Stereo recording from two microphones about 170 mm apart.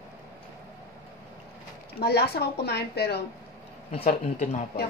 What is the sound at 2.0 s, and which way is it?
A woman's voice, 70° left (ahead or behind).